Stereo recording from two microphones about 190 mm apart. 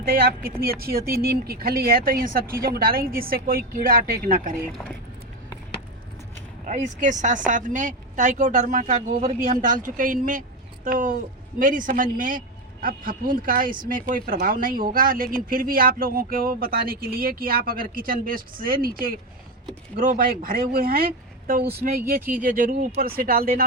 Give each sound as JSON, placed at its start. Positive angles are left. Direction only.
{"t": 0.6, "sound": "speech", "side_deg": -50}
{"t": 6.7, "sound": "speech", "side_deg": -40}